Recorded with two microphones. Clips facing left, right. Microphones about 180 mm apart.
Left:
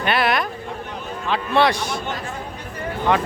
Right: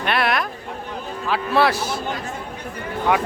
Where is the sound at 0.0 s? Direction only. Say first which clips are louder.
Left 1 dB; centre (ahead or behind).